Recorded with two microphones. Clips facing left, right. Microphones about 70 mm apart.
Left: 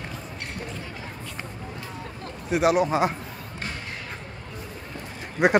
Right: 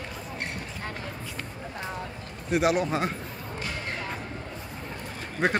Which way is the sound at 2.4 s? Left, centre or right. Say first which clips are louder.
Left 3 dB; centre.